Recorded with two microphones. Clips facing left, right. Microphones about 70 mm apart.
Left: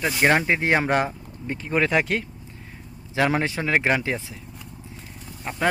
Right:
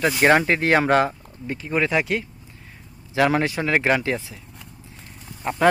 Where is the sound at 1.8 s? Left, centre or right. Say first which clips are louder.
Even; left.